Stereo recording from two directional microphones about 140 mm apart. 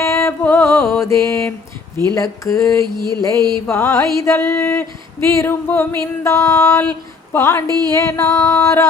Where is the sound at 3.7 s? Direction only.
15° left (ahead or behind).